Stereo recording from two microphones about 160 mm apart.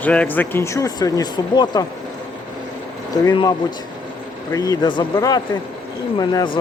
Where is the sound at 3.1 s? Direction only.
25° left (ahead or behind).